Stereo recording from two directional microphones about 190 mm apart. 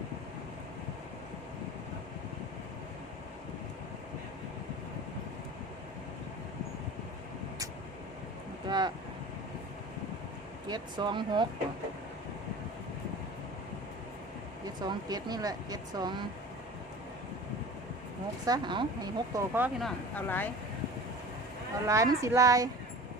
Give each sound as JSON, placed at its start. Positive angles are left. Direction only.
{"t": 8.7, "sound": "vehicle", "side_deg": -20}
{"t": 10.7, "sound": "speech", "side_deg": -25}
{"t": 14.8, "sound": "speech", "side_deg": -20}
{"t": 18.4, "sound": "speech", "side_deg": -20}
{"t": 19.8, "sound": "speech", "side_deg": 10}
{"t": 21.8, "sound": "a woman's voice", "side_deg": -15}